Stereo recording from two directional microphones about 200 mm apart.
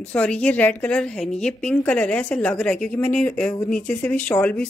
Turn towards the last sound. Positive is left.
turn(degrees=5)  # may be behind; listen again after turning